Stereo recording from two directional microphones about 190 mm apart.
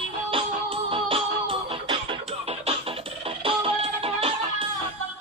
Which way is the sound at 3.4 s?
30° right (ahead or behind).